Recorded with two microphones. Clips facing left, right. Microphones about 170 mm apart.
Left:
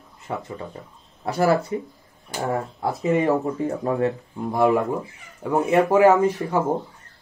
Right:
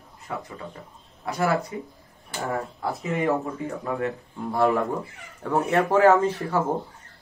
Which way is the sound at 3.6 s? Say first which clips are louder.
Left 6 dB; 35° left (ahead or behind).